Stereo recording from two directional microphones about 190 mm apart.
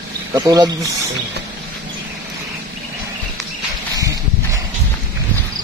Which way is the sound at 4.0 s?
15° right (ahead or behind).